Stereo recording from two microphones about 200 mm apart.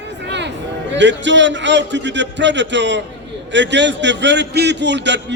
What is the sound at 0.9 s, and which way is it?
A man's voice, 65° right (ahead or behind).